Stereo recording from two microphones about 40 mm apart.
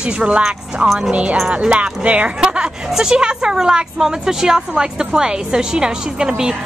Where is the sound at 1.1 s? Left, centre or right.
Right.